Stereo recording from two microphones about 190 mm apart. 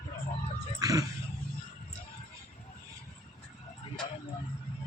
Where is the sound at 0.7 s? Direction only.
20° right (ahead or behind).